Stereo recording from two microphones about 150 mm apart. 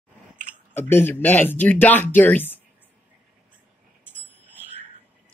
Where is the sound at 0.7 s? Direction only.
15° left (ahead or behind).